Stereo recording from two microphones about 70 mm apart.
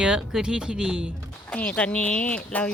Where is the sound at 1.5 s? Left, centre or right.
Centre.